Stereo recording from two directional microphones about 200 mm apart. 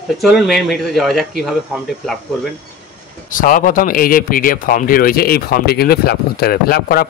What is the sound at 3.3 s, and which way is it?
Speech, 45° left (ahead or behind).